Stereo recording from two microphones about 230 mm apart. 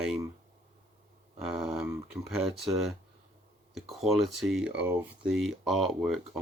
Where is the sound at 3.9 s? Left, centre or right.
Centre.